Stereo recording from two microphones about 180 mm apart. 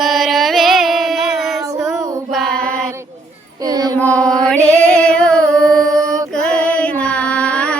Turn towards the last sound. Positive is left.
turn(degrees=5)  # may be behind; listen again after turning